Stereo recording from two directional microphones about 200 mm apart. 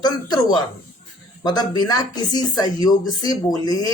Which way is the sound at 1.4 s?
20° left (ahead or behind).